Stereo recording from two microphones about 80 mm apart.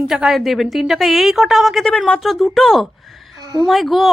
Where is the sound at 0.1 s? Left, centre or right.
Centre.